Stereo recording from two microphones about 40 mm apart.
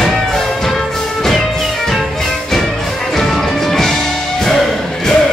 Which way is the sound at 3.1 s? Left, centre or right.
Centre.